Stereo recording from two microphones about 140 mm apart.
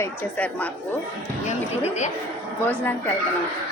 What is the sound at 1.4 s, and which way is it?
Speech, 55° left (ahead or behind).